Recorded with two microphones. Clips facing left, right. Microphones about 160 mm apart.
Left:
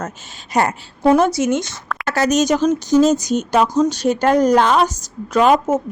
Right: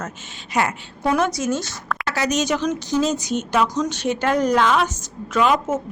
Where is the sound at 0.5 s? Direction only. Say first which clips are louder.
Left 4 dB; 35° left (ahead or behind).